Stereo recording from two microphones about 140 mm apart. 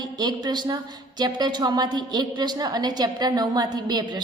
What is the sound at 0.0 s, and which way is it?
A woman's voice, 30° right (ahead or behind).